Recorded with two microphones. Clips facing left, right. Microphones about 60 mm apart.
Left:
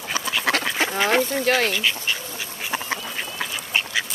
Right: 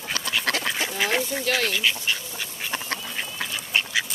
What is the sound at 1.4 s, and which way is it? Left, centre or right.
Speech, left.